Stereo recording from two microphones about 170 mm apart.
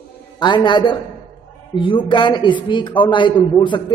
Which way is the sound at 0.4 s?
25° left (ahead or behind).